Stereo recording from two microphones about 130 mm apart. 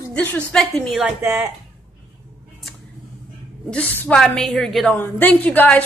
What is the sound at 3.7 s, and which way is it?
Speech, 15° left (ahead or behind).